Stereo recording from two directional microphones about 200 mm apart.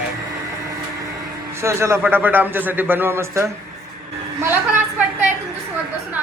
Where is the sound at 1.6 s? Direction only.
15° right (ahead or behind).